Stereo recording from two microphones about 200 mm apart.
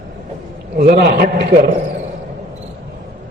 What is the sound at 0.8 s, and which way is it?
Speech, 50° right (ahead or behind).